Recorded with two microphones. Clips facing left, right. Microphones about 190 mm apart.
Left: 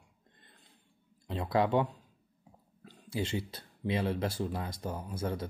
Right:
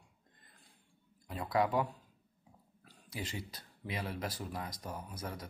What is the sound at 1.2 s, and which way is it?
Speech, 25° left (ahead or behind).